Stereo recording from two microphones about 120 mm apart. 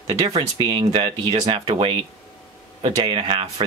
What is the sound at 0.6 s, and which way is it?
Speech, 40° right (ahead or behind).